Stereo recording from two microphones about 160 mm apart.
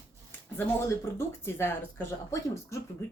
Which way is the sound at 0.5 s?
15° left (ahead or behind).